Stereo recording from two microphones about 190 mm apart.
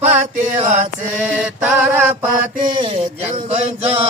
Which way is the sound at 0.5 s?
35° right (ahead or behind).